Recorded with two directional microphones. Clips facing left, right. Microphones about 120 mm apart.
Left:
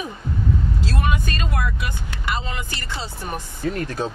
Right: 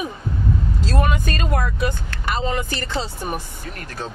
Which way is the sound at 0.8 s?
45° right (ahead or behind).